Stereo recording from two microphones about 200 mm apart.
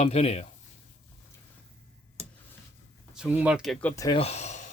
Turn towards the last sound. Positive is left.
turn(degrees=35)  # may be behind; listen again after turning